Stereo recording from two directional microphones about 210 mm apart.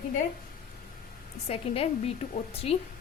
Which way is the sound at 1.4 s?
25° left (ahead or behind).